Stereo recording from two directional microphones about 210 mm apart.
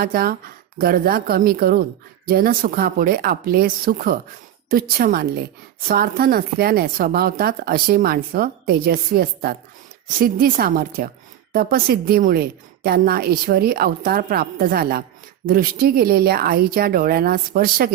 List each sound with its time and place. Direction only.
0.0 s speech: 45° right (ahead or behind)